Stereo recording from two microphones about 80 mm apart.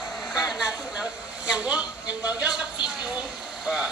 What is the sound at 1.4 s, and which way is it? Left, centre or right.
Speech, centre.